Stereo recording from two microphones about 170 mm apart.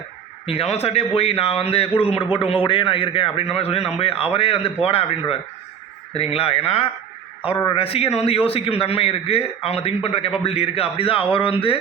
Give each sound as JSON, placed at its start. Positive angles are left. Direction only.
{"t": 0.4, "sound": "a man's voice", "side_deg": 35}